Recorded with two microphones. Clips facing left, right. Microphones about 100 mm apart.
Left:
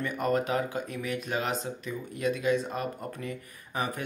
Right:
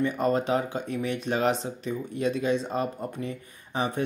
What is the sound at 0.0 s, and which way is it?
Speech, 30° right (ahead or behind).